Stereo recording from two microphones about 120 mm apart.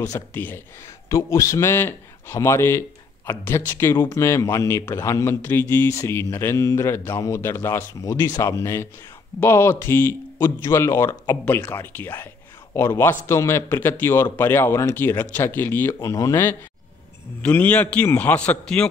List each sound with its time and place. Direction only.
0.0 s a man's voice: 20° left (ahead or behind)